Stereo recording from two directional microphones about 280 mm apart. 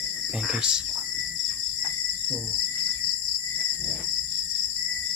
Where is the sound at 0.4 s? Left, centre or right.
Centre.